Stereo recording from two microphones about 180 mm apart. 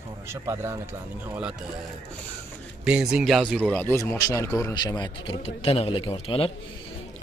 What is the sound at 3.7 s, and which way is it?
A man's voice, 10° left (ahead or behind).